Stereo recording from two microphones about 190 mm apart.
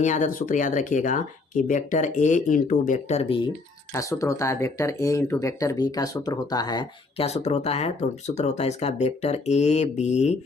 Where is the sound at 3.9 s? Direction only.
15° left (ahead or behind).